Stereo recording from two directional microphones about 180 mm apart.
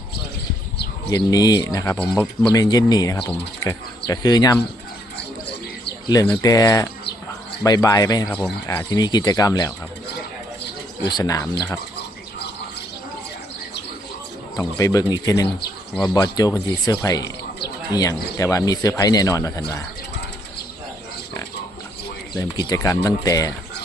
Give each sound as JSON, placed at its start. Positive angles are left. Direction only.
{"t": 1.1, "sound": "speech", "side_deg": 20}
{"t": 2.0, "sound": "speech", "side_deg": 5}
{"t": 2.5, "sound": "speech", "side_deg": 20}
{"t": 5.1, "sound": "a sound", "side_deg": 65}
{"t": 6.1, "sound": "speech", "side_deg": 25}
{"t": 8.3, "sound": "speech", "side_deg": 0}
{"t": 8.9, "sound": "speech", "side_deg": 25}
{"t": 11.0, "sound": "speech", "side_deg": 20}
{"t": 14.5, "sound": "speech", "side_deg": 20}
{"t": 22.4, "sound": "speech", "side_deg": 20}